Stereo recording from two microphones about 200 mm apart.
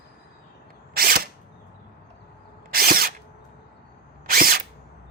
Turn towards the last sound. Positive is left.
turn(degrees=-45)  # may be behind; listen again after turning